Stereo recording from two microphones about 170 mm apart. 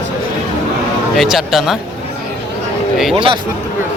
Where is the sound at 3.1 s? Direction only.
30° right (ahead or behind).